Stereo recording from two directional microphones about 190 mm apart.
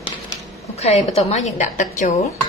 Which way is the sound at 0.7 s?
35° left (ahead or behind).